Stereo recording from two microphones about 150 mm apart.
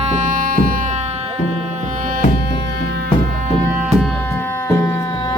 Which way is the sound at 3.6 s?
10° right (ahead or behind).